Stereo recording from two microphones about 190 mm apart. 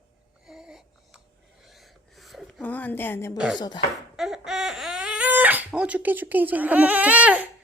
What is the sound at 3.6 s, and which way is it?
Speech, 25° left (ahead or behind).